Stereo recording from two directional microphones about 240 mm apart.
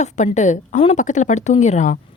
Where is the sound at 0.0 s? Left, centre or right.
Left.